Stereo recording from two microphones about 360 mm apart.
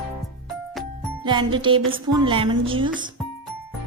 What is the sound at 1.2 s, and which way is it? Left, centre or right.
A woman's voice, centre.